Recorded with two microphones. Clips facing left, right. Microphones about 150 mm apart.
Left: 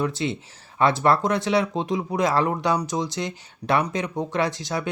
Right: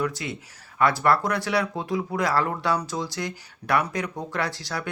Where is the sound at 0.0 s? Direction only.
25° left (ahead or behind).